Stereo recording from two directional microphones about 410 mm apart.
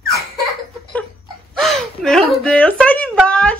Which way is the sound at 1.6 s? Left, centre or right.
Centre.